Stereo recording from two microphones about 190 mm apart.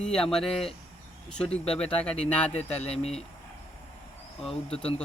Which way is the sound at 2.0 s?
5° left (ahead or behind).